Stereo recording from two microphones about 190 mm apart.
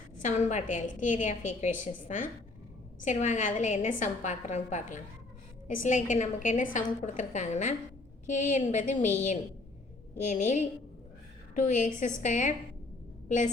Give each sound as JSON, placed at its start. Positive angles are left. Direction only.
{"t": 0.2, "sound": "a woman's voice", "side_deg": 40}